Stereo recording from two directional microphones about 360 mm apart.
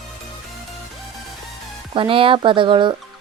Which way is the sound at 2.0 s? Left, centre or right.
Centre.